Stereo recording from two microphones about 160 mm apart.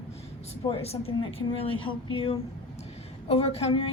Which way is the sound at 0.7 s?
40° left (ahead or behind).